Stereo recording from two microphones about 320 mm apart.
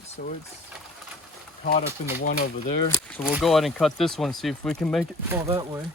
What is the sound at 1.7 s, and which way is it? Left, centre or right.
Speech, left.